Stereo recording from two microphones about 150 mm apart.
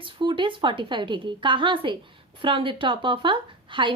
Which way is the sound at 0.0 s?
30° right (ahead or behind).